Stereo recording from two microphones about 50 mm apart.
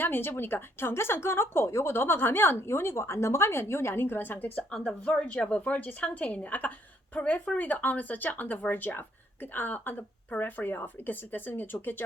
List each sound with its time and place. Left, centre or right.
0.0 s a woman's voice: left
4.7 s speech: centre
5.0 s a woman's voice: left